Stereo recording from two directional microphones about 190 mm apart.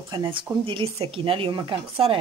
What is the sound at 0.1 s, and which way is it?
Speech, 25° right (ahead or behind).